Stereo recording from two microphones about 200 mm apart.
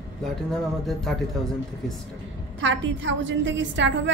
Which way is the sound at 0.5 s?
Centre (ahead or behind).